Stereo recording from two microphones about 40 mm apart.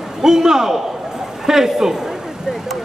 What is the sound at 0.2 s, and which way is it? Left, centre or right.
A man's voice, centre.